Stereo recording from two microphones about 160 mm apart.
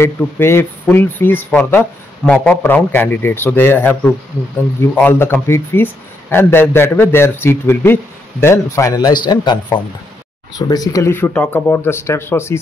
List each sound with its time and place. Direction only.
0.0 s speech: 15° left (ahead or behind)